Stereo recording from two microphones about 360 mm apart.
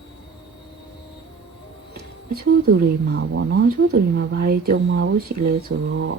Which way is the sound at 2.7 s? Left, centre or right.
Right.